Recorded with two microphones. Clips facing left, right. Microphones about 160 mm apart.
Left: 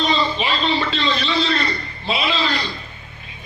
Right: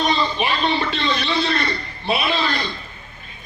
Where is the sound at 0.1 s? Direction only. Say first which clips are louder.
Even; 55° right (ahead or behind).